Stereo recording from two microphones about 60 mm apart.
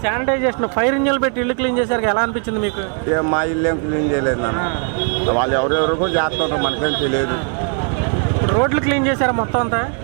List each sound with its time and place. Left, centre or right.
0.0 s speech: right
8.4 s speech: right